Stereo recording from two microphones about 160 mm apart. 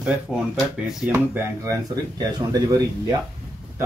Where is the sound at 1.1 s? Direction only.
15° right (ahead or behind).